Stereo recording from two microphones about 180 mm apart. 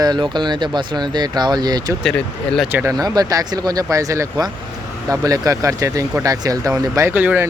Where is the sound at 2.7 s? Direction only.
15° right (ahead or behind).